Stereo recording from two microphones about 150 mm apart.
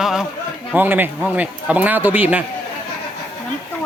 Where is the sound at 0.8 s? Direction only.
15° right (ahead or behind).